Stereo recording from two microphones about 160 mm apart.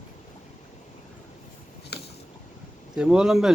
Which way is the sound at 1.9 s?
90° left.